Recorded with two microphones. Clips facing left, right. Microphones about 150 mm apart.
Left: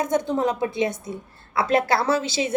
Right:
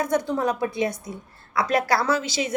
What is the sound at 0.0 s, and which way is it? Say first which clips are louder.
A woman's voice: left 1 dB; 20° left (ahead or behind).